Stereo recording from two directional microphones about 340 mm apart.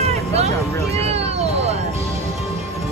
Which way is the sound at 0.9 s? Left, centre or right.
Centre.